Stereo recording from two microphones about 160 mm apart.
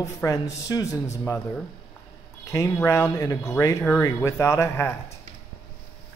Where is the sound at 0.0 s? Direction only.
20° left (ahead or behind).